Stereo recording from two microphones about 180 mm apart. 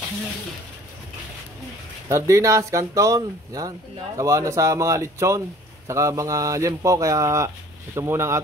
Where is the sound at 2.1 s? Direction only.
15° right (ahead or behind).